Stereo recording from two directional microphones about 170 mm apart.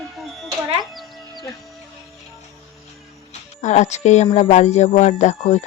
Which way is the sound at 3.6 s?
45° left (ahead or behind).